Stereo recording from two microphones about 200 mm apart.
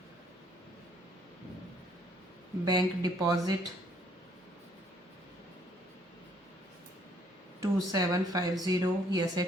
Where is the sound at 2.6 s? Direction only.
20° right (ahead or behind).